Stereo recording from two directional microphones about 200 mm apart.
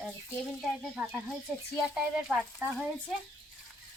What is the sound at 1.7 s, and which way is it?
Speech, 5° right (ahead or behind).